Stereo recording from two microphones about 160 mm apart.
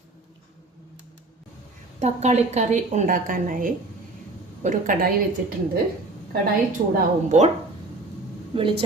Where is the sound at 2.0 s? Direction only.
45° right (ahead or behind).